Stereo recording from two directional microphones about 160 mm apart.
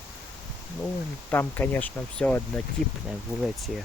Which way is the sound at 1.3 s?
15° left (ahead or behind).